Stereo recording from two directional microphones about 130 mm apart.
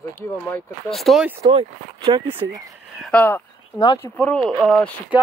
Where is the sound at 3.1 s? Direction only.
15° left (ahead or behind).